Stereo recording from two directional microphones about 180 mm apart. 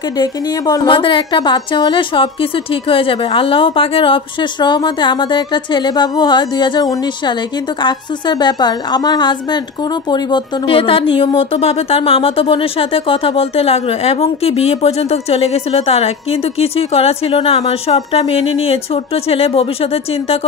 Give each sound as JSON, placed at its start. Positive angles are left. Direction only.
{"t": 0.2, "sound": "a woman's voice", "side_deg": 20}